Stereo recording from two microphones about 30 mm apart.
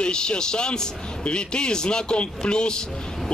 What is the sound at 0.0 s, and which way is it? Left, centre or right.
A man's voice, left.